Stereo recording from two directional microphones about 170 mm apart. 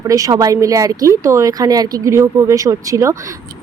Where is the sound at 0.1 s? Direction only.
20° right (ahead or behind).